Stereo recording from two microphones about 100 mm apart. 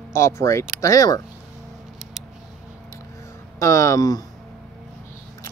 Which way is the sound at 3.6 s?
30° left (ahead or behind).